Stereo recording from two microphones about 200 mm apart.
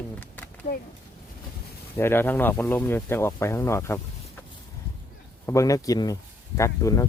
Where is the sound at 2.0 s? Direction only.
10° left (ahead or behind).